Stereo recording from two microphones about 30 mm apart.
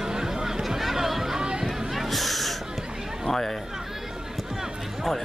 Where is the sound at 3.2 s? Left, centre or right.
Centre.